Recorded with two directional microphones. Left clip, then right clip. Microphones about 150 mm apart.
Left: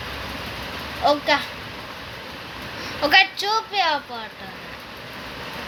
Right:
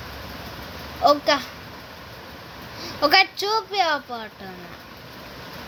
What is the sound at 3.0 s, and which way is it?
Speech, 90° right.